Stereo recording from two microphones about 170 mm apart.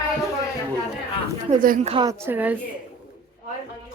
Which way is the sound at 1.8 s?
35° right (ahead or behind).